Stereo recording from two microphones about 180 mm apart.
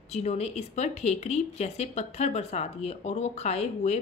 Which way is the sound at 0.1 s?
35° left (ahead or behind).